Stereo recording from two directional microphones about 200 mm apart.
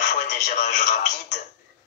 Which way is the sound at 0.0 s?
35° left (ahead or behind).